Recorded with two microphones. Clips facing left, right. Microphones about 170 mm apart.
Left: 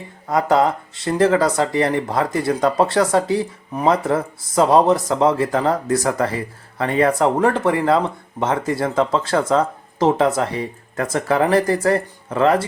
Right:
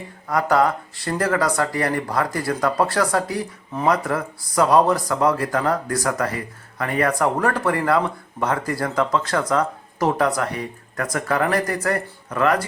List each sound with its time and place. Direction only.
0.3 s speech: 20° left (ahead or behind)